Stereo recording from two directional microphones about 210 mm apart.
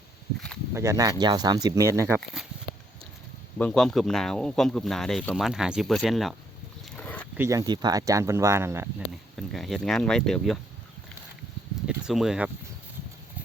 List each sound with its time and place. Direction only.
0.7 s speech: 15° right (ahead or behind)
2.2 s speech: centre (ahead or behind)
3.6 s speech: 5° left (ahead or behind)
6.9 s a sound: 5° left (ahead or behind)
7.3 s speech: 15° right (ahead or behind)
9.5 s speech: centre (ahead or behind)
11.9 s speech: centre (ahead or behind)